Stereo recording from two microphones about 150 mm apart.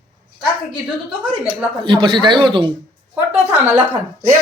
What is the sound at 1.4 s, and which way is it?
Speech, 35° right (ahead or behind).